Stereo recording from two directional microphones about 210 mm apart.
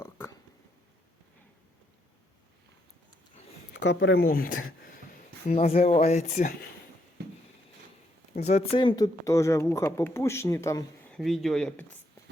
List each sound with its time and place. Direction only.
0.0 s a sound: 15° left (ahead or behind)
3.7 s speech: 55° left (ahead or behind)
5.5 s speech: 30° left (ahead or behind)
8.4 s speech: 30° left (ahead or behind); by 11.2 s 15° left (ahead or behind)
11.2 s speech: centre (ahead or behind)